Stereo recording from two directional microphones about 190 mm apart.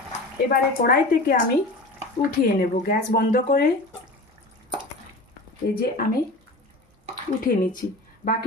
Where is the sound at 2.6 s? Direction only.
50° left (ahead or behind).